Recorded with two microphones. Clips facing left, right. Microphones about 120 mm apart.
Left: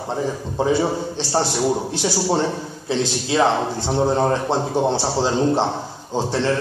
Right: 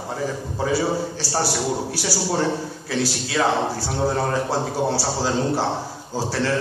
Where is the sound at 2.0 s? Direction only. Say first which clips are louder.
Left 3 dB; 20° left (ahead or behind).